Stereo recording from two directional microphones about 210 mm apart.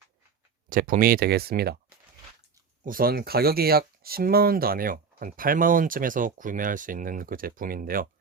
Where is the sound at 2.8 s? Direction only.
45° right (ahead or behind).